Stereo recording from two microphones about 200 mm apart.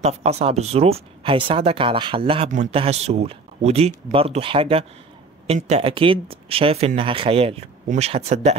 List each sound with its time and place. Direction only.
0.0 s speech: 30° right (ahead or behind)